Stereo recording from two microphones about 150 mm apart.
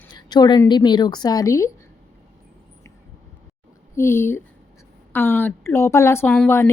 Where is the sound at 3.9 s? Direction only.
15° left (ahead or behind).